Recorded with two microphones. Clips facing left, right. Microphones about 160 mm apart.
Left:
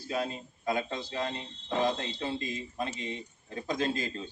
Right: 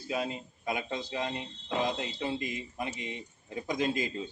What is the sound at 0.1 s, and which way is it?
Speech, 15° right (ahead or behind).